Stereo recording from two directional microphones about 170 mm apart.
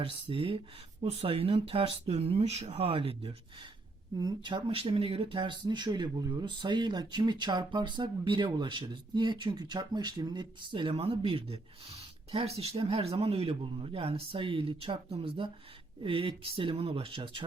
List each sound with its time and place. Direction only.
0.3 s speech: 30° right (ahead or behind)